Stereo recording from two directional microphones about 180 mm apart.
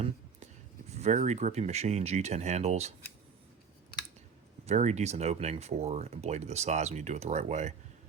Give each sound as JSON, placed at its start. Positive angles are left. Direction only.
{"t": 0.9, "sound": "speech", "side_deg": -40}
{"t": 4.6, "sound": "speech", "side_deg": -40}